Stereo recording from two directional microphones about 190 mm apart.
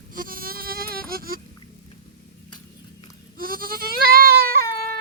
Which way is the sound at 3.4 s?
50° right (ahead or behind).